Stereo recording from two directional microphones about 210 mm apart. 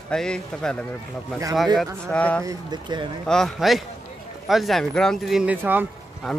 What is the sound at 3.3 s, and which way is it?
Speech, centre (ahead or behind).